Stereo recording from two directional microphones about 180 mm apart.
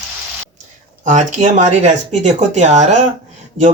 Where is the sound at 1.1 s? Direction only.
40° right (ahead or behind).